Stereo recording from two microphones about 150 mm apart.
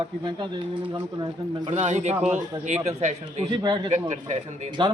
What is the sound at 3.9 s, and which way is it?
Speech, 50° right (ahead or behind).